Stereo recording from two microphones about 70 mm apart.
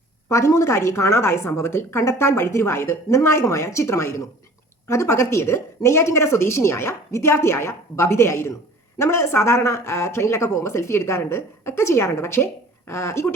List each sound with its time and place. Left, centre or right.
0.3 s a woman's voice: left